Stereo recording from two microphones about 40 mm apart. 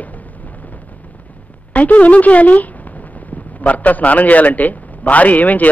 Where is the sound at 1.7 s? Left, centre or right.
Left.